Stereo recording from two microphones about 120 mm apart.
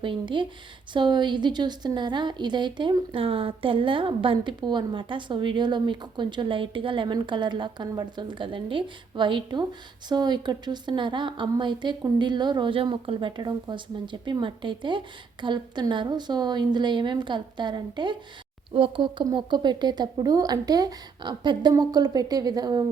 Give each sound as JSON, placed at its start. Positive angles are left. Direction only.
{"t": 0.0, "sound": "a woman's voice", "side_deg": -45}